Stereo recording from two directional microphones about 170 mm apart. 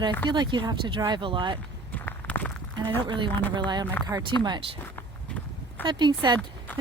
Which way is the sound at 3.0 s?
30° right (ahead or behind).